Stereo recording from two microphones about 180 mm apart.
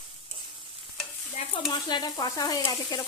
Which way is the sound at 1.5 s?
25° left (ahead or behind).